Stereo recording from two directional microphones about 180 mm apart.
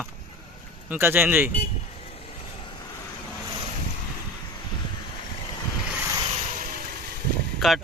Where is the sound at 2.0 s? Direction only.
30° left (ahead or behind).